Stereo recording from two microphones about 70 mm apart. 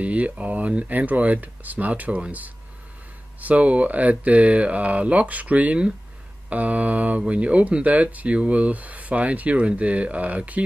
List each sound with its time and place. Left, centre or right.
0.0 s speech: centre